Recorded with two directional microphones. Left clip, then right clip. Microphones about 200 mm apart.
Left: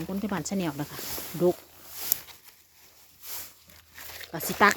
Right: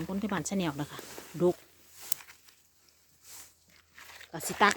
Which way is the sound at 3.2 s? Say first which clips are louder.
Left 9 dB; 60° left (ahead or behind).